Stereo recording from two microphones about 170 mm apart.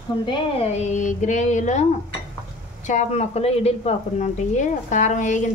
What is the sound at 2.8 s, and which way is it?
A woman's voice, 40° left (ahead or behind).